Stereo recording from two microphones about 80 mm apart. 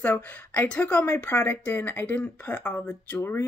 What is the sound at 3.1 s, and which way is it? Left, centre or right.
Speech, left.